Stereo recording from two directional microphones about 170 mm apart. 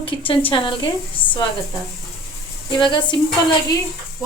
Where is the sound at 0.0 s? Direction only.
30° left (ahead or behind).